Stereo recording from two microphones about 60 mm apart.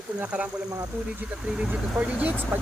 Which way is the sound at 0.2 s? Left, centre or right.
Right.